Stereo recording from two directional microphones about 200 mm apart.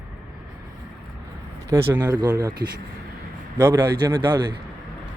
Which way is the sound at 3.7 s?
20° right (ahead or behind).